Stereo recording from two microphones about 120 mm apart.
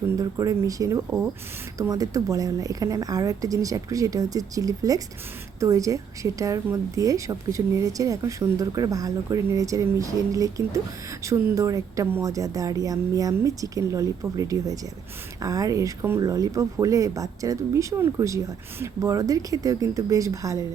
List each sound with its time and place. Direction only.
0.2 s a woman's voice: 30° right (ahead or behind)